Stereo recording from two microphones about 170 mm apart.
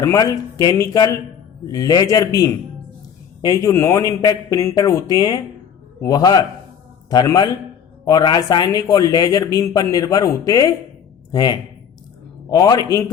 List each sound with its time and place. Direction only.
0.0 s a man's voice: 20° left (ahead or behind)